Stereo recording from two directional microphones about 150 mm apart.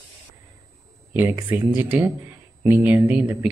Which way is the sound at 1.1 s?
15° right (ahead or behind).